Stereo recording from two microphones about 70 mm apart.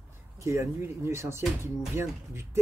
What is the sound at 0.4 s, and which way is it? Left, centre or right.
Speech, right.